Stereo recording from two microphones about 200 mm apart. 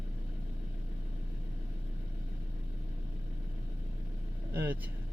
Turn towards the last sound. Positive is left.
turn(degrees=-10)  # may be behind; listen again after turning